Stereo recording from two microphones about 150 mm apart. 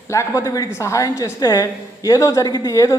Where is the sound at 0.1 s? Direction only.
20° left (ahead or behind).